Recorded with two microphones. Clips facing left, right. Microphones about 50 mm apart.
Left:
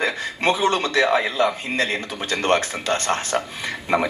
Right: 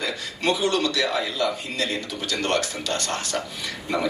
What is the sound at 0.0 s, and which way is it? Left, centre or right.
A man's voice, left.